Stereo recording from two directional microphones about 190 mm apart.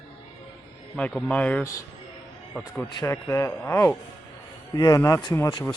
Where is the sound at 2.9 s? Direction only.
15° left (ahead or behind).